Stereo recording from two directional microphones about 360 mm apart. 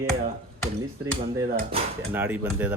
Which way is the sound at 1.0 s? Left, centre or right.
Centre.